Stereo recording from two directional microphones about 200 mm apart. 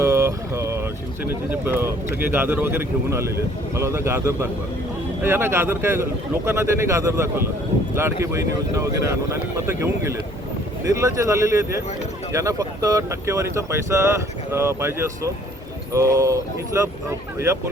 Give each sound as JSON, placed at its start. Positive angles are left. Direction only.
{"t": 0.0, "sound": "speech", "side_deg": -15}